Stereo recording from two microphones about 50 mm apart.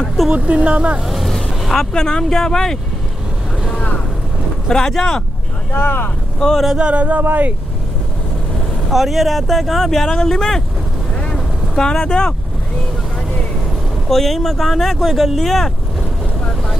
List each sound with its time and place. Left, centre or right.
0.4 s speech: right
1.0 s speech: centre
4.6 s speech: centre
5.7 s speech: left
6.4 s speech: centre
6.8 s speech: right
8.9 s speech: centre
11.7 s speech: centre
14.0 s speech: centre